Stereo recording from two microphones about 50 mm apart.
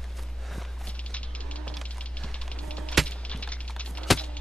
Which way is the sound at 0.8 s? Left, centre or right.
Left.